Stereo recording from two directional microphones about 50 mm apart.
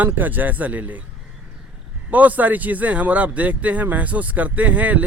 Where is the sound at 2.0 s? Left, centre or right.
Right.